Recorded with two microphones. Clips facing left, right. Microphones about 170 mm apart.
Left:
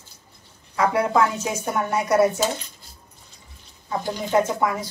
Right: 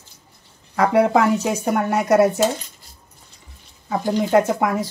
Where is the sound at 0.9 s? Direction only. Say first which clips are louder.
Right 6 dB; 75° right (ahead or behind).